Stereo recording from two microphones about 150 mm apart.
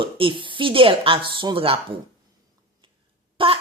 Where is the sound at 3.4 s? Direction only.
35° right (ahead or behind).